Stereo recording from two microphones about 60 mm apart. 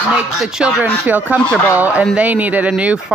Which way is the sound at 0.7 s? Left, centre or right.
Right.